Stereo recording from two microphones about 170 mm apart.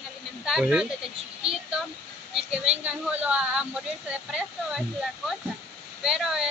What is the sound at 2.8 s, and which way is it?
Speech, 10° right (ahead or behind).